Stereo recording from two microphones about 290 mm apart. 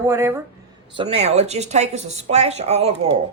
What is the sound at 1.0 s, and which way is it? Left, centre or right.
Speech, right.